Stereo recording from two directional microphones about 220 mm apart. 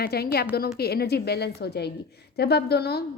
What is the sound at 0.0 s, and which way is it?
A woman's voice, 45° left (ahead or behind).